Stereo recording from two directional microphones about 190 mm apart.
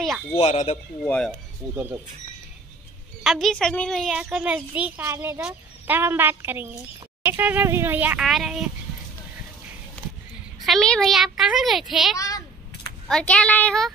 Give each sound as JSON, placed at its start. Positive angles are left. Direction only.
{"t": 0.3, "sound": "speech", "side_deg": 35}
{"t": 1.0, "sound": "a woman's voice", "side_deg": 5}
{"t": 3.3, "sound": "a child's voice", "side_deg": 0}
{"t": 10.6, "sound": "a woman's voice", "side_deg": 0}
{"t": 12.2, "sound": "a child's voice", "side_deg": 20}
{"t": 13.1, "sound": "a woman's voice", "side_deg": 5}